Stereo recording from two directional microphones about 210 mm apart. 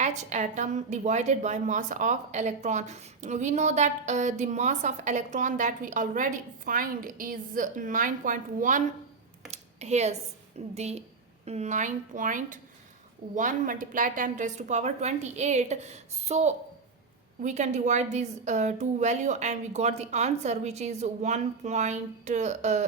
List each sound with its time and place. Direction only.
0.0 s a woman's voice: 35° right (ahead or behind)
9.5 s a sound: 30° right (ahead or behind)
10.8 s a woman's voice: 30° right (ahead or behind)